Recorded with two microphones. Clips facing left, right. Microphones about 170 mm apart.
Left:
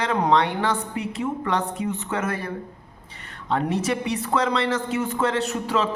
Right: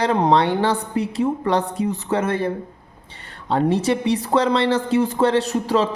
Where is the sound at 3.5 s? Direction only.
30° right (ahead or behind).